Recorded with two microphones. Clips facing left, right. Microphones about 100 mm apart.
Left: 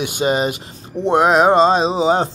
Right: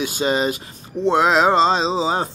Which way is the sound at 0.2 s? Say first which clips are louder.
Left 3 dB; 30° left (ahead or behind).